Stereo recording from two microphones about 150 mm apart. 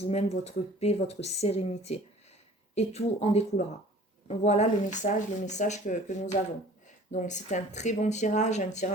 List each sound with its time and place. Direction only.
0.0 s speech: 45° left (ahead or behind)